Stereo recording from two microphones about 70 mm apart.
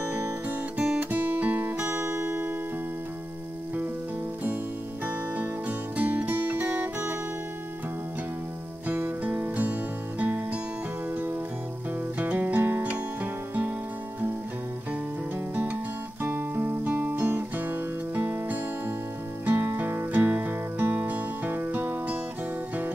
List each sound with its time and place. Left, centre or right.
0.0 s music: right
1.1 s guitar: right
5.0 s music: right
8.8 s music: right
12.2 s music: right
15.5 s music: right